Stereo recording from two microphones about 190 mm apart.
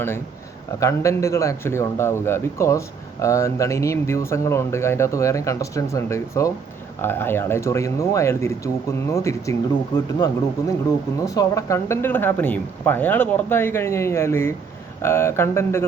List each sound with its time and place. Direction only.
0.8 s speech: 15° left (ahead or behind)